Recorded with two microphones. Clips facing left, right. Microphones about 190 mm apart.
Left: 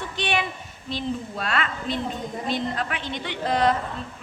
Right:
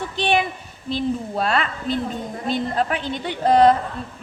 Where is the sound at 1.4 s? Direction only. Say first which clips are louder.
Right 5 dB; 35° right (ahead or behind).